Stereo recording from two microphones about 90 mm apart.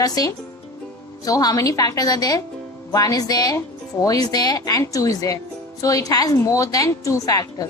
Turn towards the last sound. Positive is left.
turn(degrees=40)  # may be behind; listen again after turning